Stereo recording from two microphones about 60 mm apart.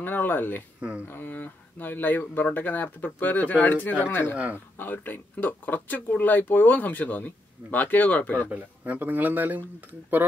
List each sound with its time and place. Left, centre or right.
0.0 s speech: left
0.7 s speech: right
1.0 s speech: left
4.0 s speech: left
8.5 s speech: right